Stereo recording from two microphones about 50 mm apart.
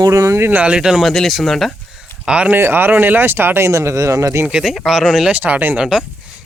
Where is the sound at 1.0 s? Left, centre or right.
Centre.